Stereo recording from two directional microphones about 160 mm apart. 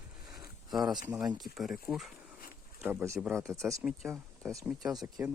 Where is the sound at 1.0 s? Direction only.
5° right (ahead or behind); by 5.2 s 25° right (ahead or behind).